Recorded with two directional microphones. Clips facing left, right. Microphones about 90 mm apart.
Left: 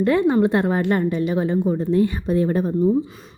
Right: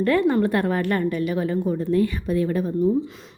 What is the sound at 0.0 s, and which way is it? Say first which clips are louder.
Speech: left 2 dB; 20° left (ahead or behind).